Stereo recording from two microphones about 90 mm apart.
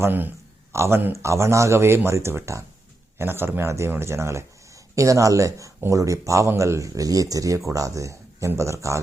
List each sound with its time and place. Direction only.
0.0 s speech: 20° right (ahead or behind)